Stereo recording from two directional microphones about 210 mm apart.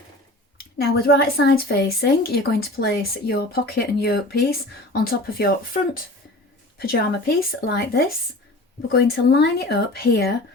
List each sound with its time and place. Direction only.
0.8 s a woman's voice: 50° left (ahead or behind)